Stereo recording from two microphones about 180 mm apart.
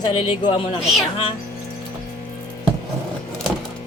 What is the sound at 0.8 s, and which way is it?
Speech, centre (ahead or behind).